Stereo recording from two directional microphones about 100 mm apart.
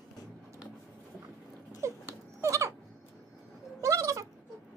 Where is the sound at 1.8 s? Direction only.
30° right (ahead or behind).